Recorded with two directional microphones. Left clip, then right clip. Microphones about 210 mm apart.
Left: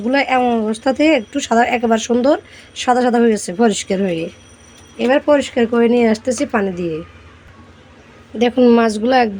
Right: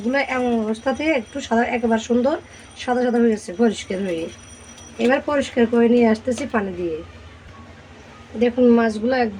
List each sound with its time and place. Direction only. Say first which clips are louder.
0.1 s speech: left 6 dB; 45° left (ahead or behind)
8.4 s speech: left 4 dB; 45° left (ahead or behind)